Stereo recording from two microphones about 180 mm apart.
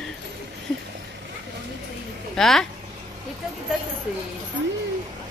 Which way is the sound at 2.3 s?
Centre (ahead or behind).